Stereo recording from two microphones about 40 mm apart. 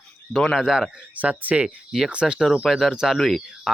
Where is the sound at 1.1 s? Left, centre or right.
Right.